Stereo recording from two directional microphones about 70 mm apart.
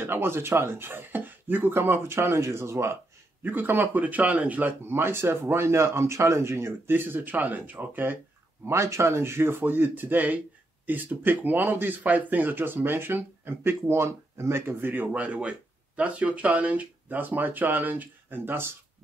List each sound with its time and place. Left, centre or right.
0.0 s speech: right
3.4 s speech: right
8.6 s speech: right